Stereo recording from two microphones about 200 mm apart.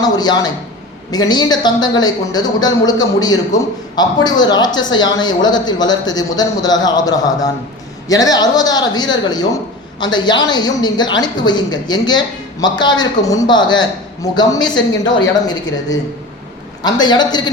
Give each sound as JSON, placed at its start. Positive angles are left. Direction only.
{"t": 0.0, "sound": "speech", "side_deg": 20}
{"t": 14.8, "sound": "a woman's voice", "side_deg": 65}
{"t": 15.4, "sound": "speech", "side_deg": 20}